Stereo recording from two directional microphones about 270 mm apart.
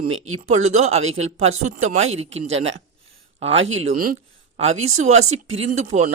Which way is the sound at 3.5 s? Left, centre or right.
Right.